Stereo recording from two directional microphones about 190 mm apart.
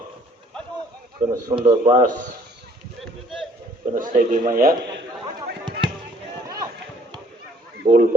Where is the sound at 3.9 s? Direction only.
45° right (ahead or behind).